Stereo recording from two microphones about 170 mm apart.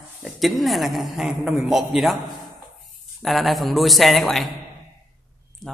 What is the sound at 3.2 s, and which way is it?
A woman's voice, centre (ahead or behind).